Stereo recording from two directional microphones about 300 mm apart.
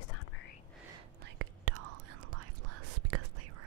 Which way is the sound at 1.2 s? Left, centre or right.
Right.